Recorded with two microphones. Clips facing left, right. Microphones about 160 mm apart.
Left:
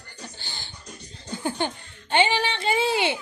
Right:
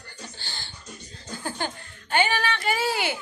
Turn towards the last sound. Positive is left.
turn(degrees=25)  # may be behind; listen again after turning